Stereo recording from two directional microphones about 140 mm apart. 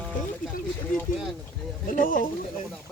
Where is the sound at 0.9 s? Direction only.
75° left (ahead or behind).